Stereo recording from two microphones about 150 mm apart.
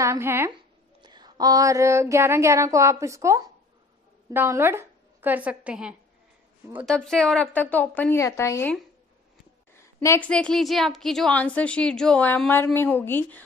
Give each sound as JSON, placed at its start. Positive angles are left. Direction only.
{"t": 0.0, "sound": "speech", "side_deg": -15}
{"t": 1.0, "sound": "a sound", "side_deg": -30}
{"t": 4.3, "sound": "a woman's voice", "side_deg": -15}
{"t": 10.0, "sound": "a woman's voice", "side_deg": 10}